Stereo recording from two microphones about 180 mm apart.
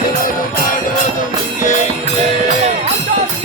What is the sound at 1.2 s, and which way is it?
Music, 45° left (ahead or behind).